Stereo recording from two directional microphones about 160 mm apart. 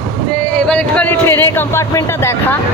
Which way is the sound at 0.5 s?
5° left (ahead or behind).